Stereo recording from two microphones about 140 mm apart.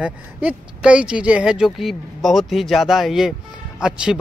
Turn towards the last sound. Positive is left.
turn(degrees=-5)  # may be behind; listen again after turning